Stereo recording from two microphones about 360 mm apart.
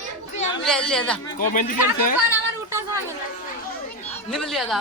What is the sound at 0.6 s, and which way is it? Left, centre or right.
Speech, centre.